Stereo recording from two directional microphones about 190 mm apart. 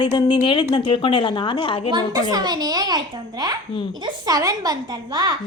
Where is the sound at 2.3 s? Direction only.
20° right (ahead or behind).